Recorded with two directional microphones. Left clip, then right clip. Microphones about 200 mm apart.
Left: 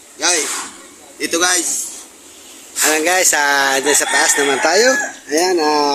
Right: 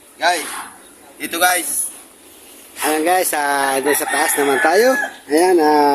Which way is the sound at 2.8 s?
15° right (ahead or behind).